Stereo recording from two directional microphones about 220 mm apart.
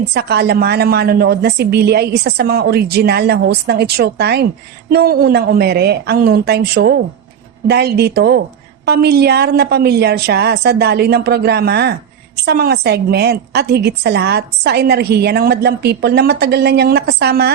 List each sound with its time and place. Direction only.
0.1 s a woman's voice: 50° right (ahead or behind)